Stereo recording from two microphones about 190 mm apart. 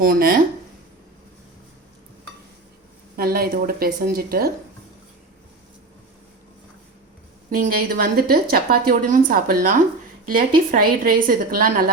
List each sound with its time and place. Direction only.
0.0 s a woman's voice: 50° right (ahead or behind)
3.2 s a woman's voice: 55° right (ahead or behind)
7.5 s a woman's voice: 50° right (ahead or behind)